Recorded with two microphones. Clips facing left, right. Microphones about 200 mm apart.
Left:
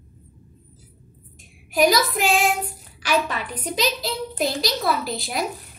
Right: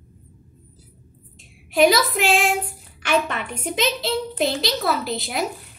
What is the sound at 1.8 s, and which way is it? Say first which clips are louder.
Speech: right 2 dB; 25° right (ahead or behind).